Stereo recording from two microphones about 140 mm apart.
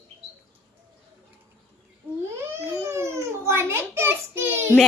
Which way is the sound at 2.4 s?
20° right (ahead or behind).